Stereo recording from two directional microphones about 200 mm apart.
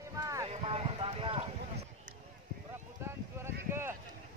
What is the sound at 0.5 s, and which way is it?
Clip-clop, 30° right (ahead or behind).